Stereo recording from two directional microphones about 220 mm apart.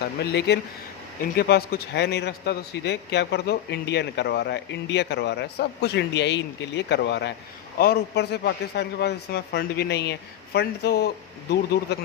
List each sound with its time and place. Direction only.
0.2 s a man's voice: 50° left (ahead or behind)